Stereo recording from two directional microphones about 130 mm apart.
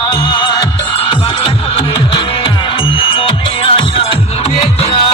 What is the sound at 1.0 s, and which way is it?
Music, 45° left (ahead or behind).